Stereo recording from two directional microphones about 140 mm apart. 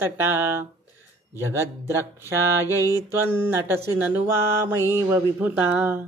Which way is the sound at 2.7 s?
25° left (ahead or behind).